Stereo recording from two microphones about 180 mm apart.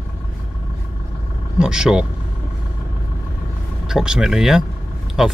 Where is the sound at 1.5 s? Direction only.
5° right (ahead or behind).